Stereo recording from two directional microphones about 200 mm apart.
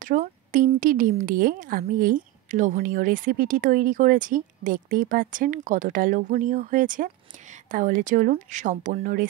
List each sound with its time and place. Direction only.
0.0 s a woman's voice: 40° right (ahead or behind)